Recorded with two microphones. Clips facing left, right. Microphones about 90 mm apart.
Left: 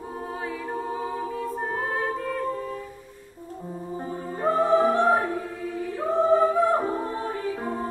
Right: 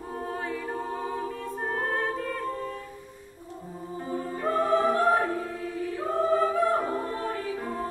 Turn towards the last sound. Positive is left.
turn(degrees=25)  # may be behind; listen again after turning